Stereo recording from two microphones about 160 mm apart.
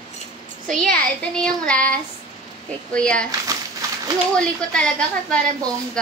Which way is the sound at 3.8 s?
20° right (ahead or behind).